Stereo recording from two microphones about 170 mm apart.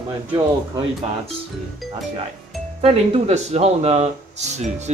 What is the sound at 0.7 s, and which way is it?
Speech, 30° right (ahead or behind).